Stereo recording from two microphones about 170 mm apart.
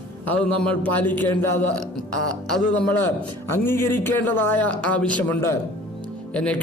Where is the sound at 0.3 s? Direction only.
10° left (ahead or behind).